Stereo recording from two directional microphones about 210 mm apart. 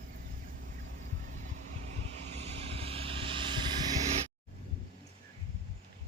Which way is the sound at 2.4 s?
30° right (ahead or behind).